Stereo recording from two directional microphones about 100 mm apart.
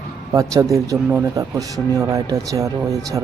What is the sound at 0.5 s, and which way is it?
Speech, 35° right (ahead or behind).